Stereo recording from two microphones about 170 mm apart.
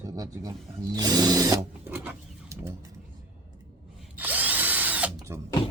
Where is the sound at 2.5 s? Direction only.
15° right (ahead or behind).